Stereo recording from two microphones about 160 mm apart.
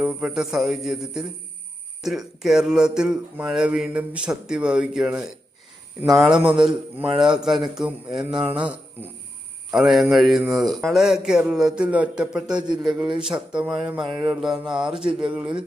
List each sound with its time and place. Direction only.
0.0 s speech: 10° right (ahead or behind)